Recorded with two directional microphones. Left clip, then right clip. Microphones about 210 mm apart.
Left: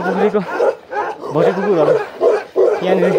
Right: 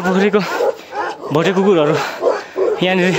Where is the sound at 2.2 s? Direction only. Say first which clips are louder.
Left 3 dB; 60° left (ahead or behind).